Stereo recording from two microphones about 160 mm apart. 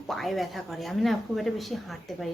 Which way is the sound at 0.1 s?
Centre (ahead or behind).